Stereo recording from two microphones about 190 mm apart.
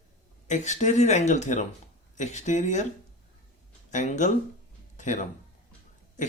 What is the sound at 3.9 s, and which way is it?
Speech, 40° left (ahead or behind).